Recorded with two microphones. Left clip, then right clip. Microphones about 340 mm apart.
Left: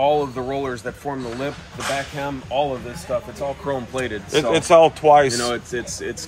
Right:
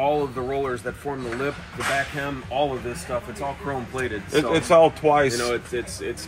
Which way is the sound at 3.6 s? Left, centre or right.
Left.